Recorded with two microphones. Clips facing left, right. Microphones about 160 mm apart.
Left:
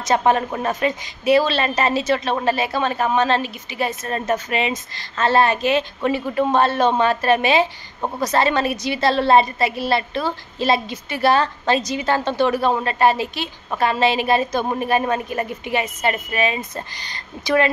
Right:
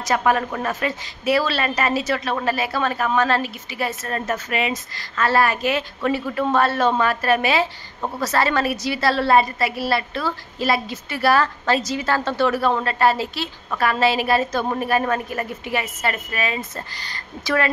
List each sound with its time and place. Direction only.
0.0 s speech: 25° left (ahead or behind)